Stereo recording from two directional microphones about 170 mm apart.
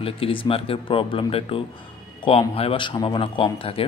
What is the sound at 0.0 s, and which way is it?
A man's voice, 30° left (ahead or behind).